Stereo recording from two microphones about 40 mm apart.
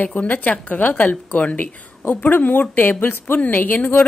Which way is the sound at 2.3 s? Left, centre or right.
Left.